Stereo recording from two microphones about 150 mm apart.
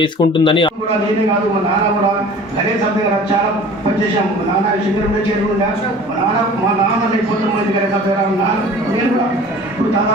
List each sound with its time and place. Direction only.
0.0 s speech: 30° left (ahead or behind)